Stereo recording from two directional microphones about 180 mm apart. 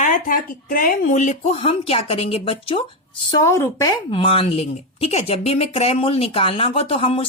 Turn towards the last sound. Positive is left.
turn(degrees=30)  # may be behind; listen again after turning